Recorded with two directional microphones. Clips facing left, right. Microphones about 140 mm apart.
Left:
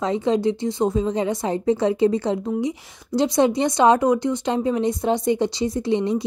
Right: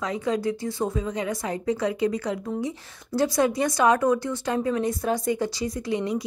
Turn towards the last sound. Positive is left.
turn(degrees=25)  # may be behind; listen again after turning